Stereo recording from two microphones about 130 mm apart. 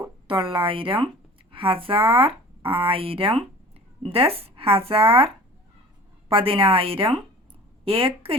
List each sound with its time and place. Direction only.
0.3 s speech: 40° right (ahead or behind)